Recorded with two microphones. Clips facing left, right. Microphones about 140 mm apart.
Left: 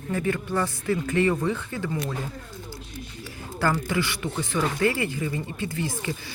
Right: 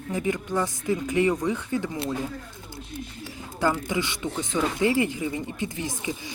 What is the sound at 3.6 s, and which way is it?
Speech, 20° right (ahead or behind).